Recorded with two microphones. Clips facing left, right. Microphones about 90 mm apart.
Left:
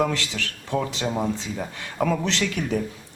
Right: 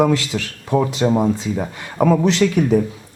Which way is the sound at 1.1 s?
25° right (ahead or behind).